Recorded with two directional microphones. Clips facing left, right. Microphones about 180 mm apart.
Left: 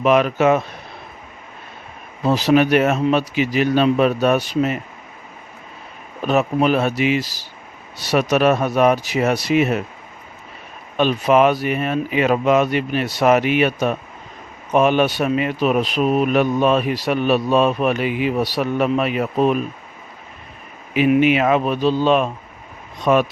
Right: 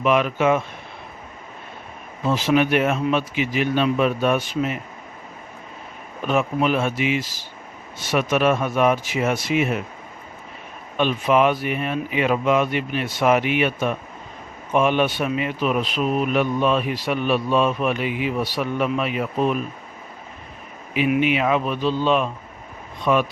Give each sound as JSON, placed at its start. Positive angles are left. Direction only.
{"t": 0.0, "sound": "speech", "side_deg": 40}
{"t": 2.2, "sound": "speech", "side_deg": 35}
{"t": 6.2, "sound": "speech", "side_deg": 40}
{"t": 10.9, "sound": "speech", "side_deg": 40}
{"t": 21.3, "sound": "speech", "side_deg": 50}